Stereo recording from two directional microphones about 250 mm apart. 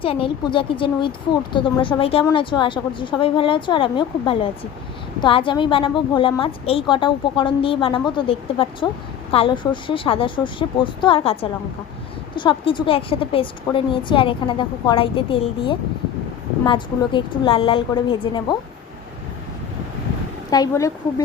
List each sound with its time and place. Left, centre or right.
0.0 s a woman's voice: left
20.5 s a woman's voice: centre